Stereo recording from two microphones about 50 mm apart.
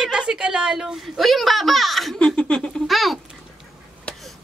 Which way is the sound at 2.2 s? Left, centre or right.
Centre.